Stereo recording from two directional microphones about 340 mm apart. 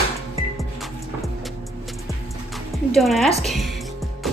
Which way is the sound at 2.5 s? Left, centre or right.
Centre.